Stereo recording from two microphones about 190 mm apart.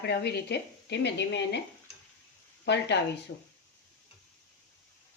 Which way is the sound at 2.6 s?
65° left (ahead or behind).